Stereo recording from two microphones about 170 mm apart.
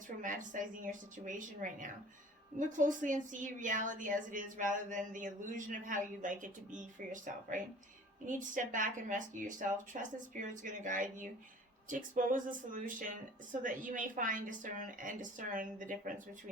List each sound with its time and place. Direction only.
0.2 s a woman's voice: 50° right (ahead or behind)